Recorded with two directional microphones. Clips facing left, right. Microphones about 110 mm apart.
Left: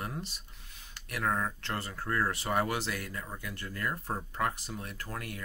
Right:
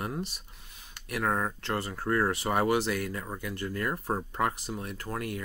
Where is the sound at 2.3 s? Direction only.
20° right (ahead or behind).